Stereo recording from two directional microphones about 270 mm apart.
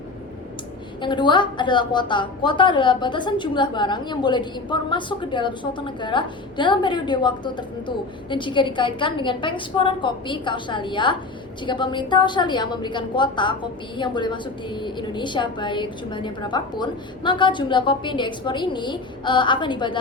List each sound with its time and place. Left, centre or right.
1.0 s a woman's voice: centre